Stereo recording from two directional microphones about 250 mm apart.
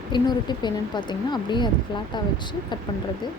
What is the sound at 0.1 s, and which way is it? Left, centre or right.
Speech, centre.